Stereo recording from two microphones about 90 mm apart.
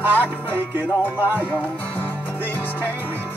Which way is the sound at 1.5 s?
20° left (ahead or behind).